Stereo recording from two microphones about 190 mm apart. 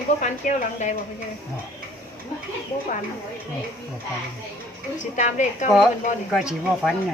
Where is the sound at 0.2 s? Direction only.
40° left (ahead or behind).